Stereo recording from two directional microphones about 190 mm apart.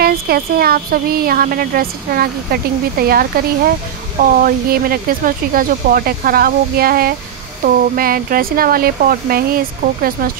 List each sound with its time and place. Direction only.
0.0 s speech: 55° right (ahead or behind)